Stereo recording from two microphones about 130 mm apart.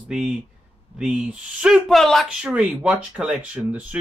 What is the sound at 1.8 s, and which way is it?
Speech, 5° left (ahead or behind).